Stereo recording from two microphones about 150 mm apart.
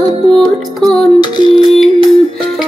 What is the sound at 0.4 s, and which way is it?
Music, centre (ahead or behind).